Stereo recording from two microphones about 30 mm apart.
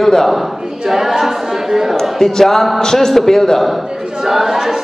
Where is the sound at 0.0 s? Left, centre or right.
Centre.